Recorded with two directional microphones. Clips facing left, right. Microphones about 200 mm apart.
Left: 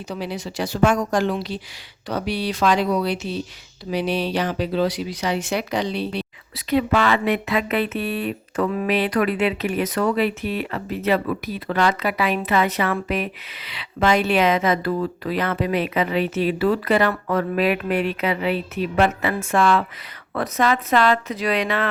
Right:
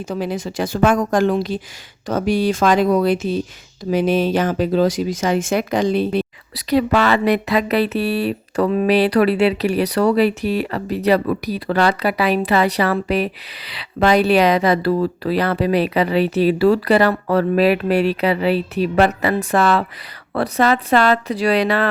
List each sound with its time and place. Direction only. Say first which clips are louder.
0.1 s a woman's voice: right 5 dB; 50° right (ahead or behind)